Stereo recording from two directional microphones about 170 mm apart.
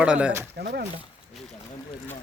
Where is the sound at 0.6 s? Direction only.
65° right (ahead or behind).